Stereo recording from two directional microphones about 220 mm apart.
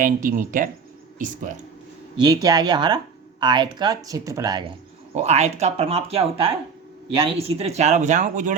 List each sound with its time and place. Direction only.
0.0 s speech: 35° right (ahead or behind)
2.1 s speech: 20° right (ahead or behind)
5.1 s speech: 30° right (ahead or behind)